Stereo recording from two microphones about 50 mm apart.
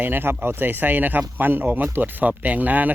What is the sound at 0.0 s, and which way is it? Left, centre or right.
Speech, right.